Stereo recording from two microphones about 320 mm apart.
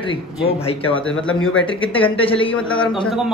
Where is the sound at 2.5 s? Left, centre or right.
Centre.